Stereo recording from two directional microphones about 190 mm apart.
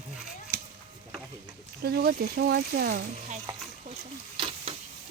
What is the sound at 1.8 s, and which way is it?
Speech, 55° right (ahead or behind).